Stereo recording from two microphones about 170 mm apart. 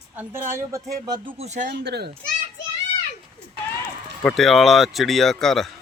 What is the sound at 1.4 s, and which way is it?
Speech, 45° right (ahead or behind).